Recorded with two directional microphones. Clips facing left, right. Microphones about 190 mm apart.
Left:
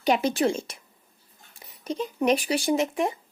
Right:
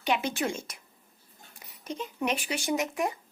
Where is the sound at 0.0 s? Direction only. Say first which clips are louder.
Left 6 dB; 35° left (ahead or behind).